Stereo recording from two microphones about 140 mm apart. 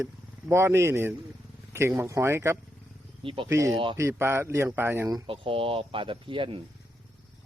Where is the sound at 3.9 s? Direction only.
20° right (ahead or behind).